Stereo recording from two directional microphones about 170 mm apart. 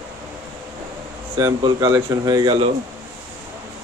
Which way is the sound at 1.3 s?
25° right (ahead or behind).